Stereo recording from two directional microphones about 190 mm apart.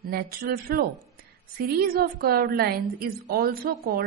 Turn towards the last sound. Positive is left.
turn(degrees=-50)  # may be behind; listen again after turning